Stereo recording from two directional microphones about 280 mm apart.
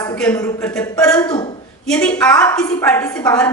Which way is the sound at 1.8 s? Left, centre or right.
Centre.